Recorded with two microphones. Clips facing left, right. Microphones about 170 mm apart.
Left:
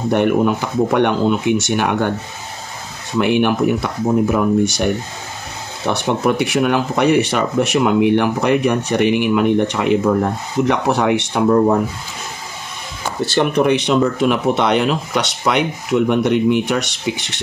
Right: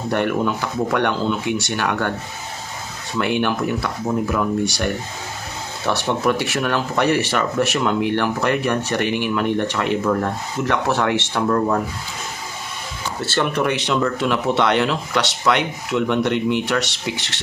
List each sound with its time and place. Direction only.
0.1 s speech: 20° left (ahead or behind)
3.2 s speech: 15° left (ahead or behind)
5.9 s speech: 20° left (ahead or behind)
13.2 s speech: 15° left (ahead or behind)